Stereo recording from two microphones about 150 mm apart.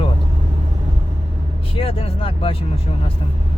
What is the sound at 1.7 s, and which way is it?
Speech, 40° left (ahead or behind).